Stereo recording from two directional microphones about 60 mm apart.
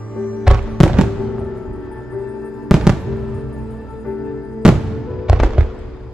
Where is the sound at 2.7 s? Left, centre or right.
Centre.